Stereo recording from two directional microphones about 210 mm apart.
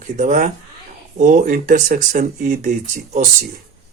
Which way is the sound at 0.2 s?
35° right (ahead or behind).